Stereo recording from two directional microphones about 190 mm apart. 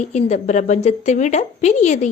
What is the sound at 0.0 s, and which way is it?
A woman's voice, 40° left (ahead or behind).